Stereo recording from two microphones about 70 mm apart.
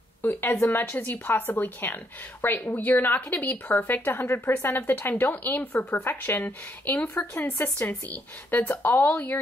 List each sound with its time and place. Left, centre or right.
0.2 s speech: left
0.8 s a woman's voice: left
7.3 s a woman's voice: left